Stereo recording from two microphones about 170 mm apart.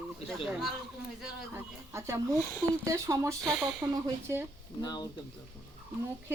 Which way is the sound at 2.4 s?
15° left (ahead or behind).